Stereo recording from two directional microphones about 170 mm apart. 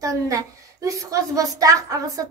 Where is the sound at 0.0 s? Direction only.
20° right (ahead or behind).